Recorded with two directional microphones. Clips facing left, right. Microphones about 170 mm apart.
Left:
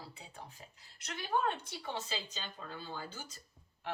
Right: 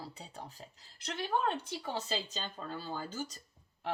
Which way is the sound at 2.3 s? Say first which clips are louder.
Right 4 dB; 45° right (ahead or behind).